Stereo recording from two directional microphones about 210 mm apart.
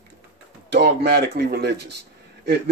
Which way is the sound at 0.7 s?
55° right (ahead or behind).